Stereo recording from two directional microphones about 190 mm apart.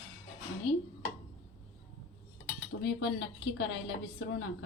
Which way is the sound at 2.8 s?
70° left (ahead or behind).